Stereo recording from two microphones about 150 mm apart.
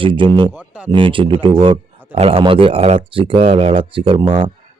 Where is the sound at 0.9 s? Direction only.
35° right (ahead or behind).